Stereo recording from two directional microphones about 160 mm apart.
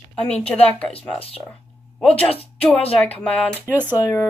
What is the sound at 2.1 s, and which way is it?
Speech, 35° left (ahead or behind).